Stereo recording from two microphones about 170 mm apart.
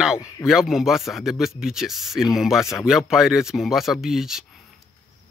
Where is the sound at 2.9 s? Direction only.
Centre (ahead or behind).